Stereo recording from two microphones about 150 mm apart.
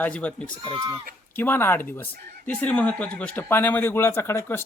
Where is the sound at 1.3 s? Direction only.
15° left (ahead or behind).